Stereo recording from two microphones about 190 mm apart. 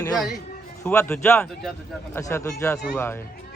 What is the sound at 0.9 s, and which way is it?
Speech, 10° left (ahead or behind).